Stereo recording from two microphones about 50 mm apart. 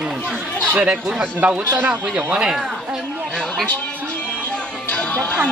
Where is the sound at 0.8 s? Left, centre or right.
Right.